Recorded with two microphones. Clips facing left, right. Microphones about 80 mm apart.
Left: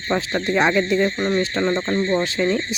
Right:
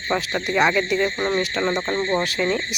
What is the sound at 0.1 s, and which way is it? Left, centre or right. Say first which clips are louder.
Speech: left 1 dB; centre.